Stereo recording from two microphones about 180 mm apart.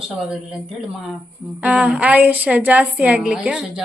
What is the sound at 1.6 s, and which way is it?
A woman's voice, 5° right (ahead or behind).